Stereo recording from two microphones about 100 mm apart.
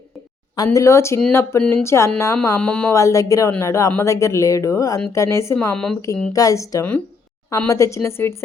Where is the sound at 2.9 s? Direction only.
35° left (ahead or behind).